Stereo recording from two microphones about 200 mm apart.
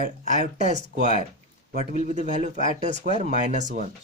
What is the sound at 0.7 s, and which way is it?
Speech, 40° right (ahead or behind).